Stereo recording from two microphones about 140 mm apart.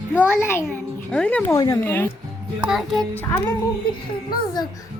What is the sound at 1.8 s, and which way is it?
Speech, 15° left (ahead or behind).